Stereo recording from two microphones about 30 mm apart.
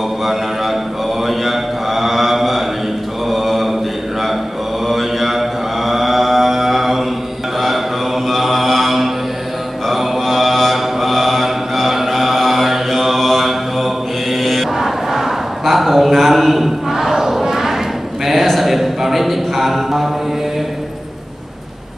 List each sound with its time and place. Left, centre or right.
0.2 s mantra: centre
4.8 s mantra: centre
8.3 s mantra: centre
14.8 s crowd: centre
15.7 s a sound: centre
16.9 s crowd: centre
17.5 s thump: centre
18.2 s a sound: centre